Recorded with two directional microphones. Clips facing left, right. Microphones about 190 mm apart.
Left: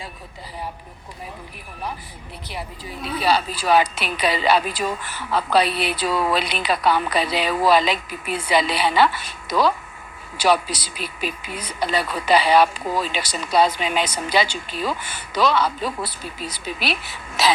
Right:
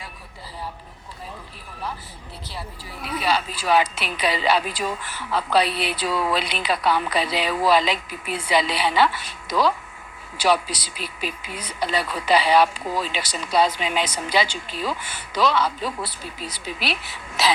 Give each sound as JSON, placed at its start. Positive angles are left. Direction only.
{"t": 2.5, "sound": "a woman's voice", "side_deg": 20}